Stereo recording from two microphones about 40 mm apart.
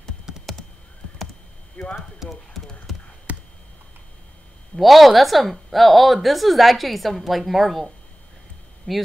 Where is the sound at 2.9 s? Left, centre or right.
Centre.